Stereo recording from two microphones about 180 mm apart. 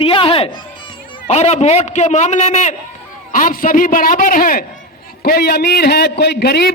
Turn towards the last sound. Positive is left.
turn(degrees=65)  # may be behind; listen again after turning